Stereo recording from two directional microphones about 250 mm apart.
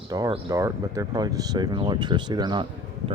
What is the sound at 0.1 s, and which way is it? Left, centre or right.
Speech, centre.